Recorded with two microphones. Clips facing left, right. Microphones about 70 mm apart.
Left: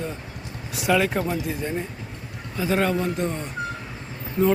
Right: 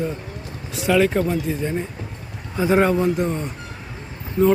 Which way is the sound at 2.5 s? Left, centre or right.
Right.